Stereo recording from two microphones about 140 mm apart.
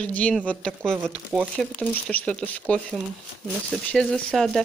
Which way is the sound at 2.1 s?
10° left (ahead or behind).